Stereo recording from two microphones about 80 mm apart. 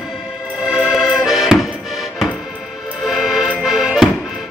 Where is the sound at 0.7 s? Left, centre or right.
Centre.